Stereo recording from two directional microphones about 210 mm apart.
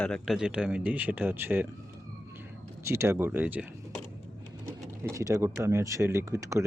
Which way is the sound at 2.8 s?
10° right (ahead or behind).